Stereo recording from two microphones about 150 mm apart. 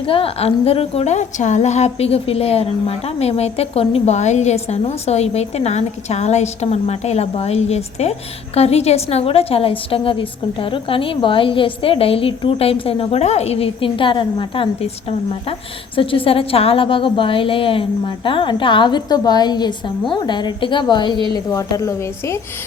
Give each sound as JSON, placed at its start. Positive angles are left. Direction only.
{"t": 0.1, "sound": "a woman's voice", "side_deg": 40}
{"t": 16.0, "sound": "a woman's voice", "side_deg": 40}